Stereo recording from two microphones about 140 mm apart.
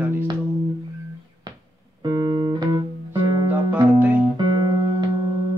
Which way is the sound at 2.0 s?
30° right (ahead or behind).